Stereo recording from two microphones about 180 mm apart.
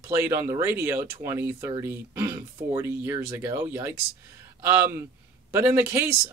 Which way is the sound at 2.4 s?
25° right (ahead or behind).